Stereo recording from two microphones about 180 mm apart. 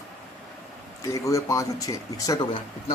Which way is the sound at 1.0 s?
20° left (ahead or behind).